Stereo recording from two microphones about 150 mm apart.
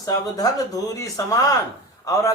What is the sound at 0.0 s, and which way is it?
A man's voice, 25° left (ahead or behind).